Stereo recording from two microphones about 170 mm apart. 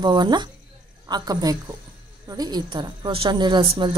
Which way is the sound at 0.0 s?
25° right (ahead or behind).